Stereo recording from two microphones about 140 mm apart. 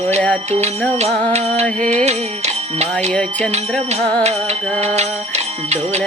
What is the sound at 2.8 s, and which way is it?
Music, 50° right (ahead or behind).